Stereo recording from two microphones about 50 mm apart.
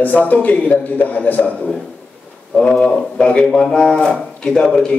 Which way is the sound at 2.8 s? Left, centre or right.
Centre.